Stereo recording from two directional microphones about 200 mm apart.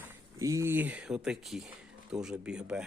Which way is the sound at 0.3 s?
15° right (ahead or behind).